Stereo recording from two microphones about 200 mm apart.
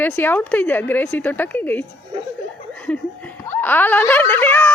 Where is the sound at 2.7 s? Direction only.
5° left (ahead or behind).